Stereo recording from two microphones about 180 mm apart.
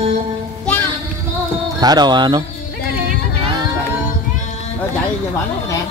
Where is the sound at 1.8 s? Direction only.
25° right (ahead or behind).